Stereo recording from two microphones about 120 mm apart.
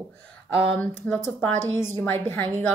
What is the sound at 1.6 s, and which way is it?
A woman's voice, 20° left (ahead or behind).